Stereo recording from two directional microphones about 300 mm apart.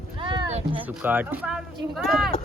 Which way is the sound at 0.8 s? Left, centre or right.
Centre.